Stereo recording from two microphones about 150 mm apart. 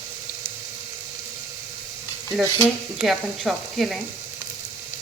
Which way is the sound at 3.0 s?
Centre (ahead or behind).